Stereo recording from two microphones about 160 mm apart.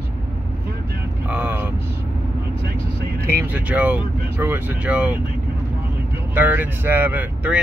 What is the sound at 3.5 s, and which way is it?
Speech, 10° right (ahead or behind).